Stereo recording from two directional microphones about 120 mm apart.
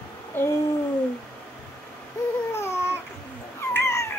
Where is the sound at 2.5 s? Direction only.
20° left (ahead or behind).